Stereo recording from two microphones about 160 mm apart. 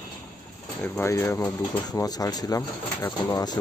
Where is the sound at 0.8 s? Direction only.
15° left (ahead or behind).